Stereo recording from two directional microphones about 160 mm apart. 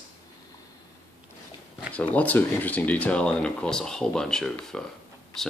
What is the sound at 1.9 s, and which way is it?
Speech, 10° left (ahead or behind).